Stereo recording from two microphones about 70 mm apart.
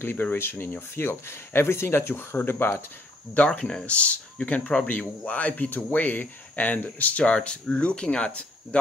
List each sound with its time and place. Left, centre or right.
0.0 s speech: left
3.3 s speech: centre